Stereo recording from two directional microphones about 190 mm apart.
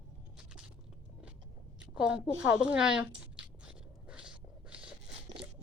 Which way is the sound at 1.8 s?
5° right (ahead or behind).